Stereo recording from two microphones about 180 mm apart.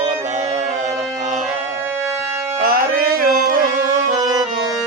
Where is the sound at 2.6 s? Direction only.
55° right (ahead or behind).